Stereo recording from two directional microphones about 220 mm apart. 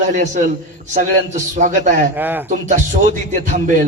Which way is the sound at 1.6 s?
35° right (ahead or behind).